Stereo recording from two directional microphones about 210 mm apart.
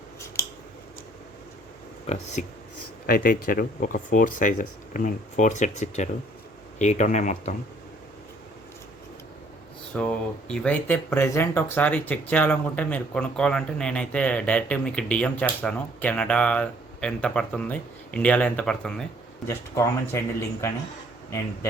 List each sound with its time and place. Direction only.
2.4 s speech: 35° left (ahead or behind)
9.9 s speech: 5° left (ahead or behind)